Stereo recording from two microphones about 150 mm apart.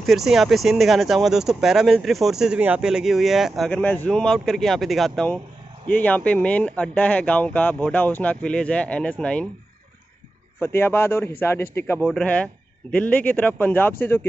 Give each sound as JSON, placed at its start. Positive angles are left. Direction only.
{"t": 0.0, "sound": "speech", "side_deg": 0}
{"t": 10.6, "sound": "speech", "side_deg": 15}
{"t": 12.0, "sound": "speech", "side_deg": 5}